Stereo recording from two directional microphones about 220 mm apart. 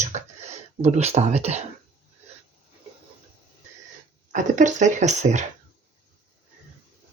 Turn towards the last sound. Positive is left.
turn(degrees=-30)  # may be behind; listen again after turning